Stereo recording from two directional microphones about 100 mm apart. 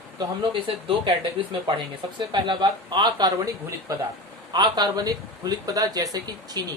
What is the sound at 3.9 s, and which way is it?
Speech, 35° right (ahead or behind).